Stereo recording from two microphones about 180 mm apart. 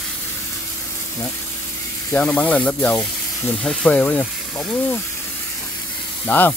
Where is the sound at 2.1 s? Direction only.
10° left (ahead or behind).